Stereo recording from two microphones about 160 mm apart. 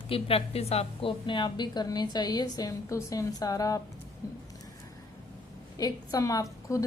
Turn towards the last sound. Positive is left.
turn(degrees=20)  # may be behind; listen again after turning